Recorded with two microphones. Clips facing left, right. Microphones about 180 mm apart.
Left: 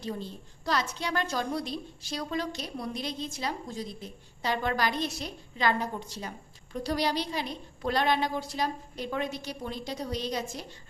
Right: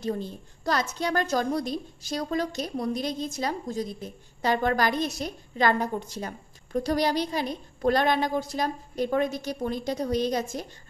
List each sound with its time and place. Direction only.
0.0 s a woman's voice: 50° right (ahead or behind)